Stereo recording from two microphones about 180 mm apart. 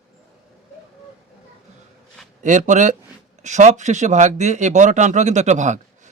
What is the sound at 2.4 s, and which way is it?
Speech, 40° right (ahead or behind).